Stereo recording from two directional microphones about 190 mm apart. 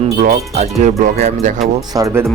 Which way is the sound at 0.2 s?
40° right (ahead or behind).